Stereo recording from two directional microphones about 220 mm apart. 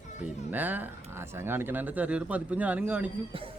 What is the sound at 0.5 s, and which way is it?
A man's voice, 10° right (ahead or behind).